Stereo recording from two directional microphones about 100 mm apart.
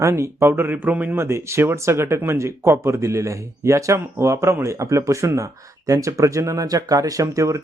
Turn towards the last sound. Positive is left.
turn(degrees=-30)  # may be behind; listen again after turning